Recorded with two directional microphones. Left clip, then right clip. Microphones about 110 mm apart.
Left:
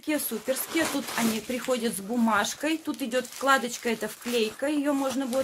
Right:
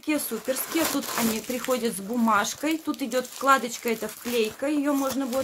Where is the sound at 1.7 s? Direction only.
15° right (ahead or behind).